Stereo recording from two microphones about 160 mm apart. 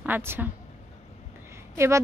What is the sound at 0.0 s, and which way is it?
Speech, 15° right (ahead or behind).